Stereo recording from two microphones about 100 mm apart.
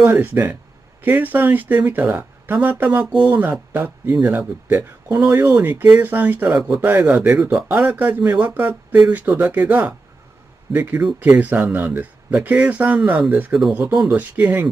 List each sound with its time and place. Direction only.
0.0 s speech: 20° right (ahead or behind)